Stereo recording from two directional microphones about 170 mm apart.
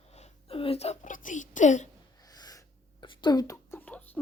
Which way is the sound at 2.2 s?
20° left (ahead or behind).